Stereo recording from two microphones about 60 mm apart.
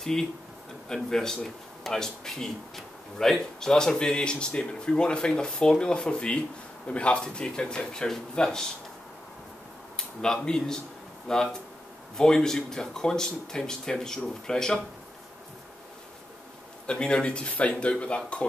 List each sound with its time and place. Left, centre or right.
0.0 s a man's voice: centre
9.9 s speech: centre
16.8 s speech: centre